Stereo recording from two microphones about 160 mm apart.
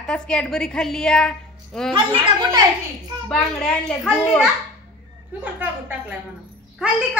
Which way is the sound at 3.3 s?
5° left (ahead or behind).